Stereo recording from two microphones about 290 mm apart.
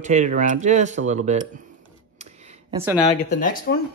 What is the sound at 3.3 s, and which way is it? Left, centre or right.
Speech, left.